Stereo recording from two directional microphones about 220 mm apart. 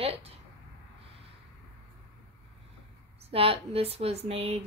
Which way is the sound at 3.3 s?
25° right (ahead or behind).